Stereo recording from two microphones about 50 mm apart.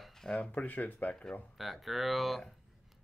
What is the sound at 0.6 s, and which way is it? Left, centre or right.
Speech, left.